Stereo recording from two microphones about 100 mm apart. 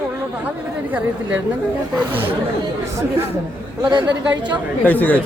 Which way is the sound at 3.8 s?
45° right (ahead or behind).